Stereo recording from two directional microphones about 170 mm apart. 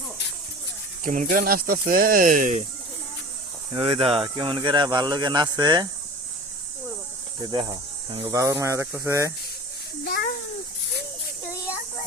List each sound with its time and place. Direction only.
1.0 s speech: 50° right (ahead or behind)
3.7 s speech: 35° right (ahead or behind)
7.4 s speech: 25° right (ahead or behind)
8.3 s speech: 20° right (ahead or behind)
10.0 s a sound: 70° left (ahead or behind)